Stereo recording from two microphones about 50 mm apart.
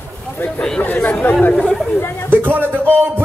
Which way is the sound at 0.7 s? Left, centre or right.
Left.